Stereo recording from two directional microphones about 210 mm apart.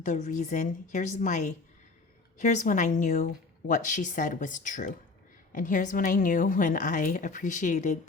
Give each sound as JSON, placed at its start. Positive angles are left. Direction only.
{"t": 0.0, "sound": "a woman's voice", "side_deg": 35}